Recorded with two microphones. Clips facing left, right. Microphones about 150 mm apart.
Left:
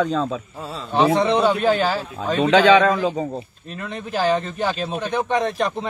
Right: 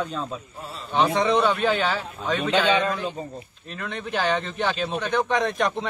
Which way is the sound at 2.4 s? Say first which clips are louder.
Left 8 dB; 90° left.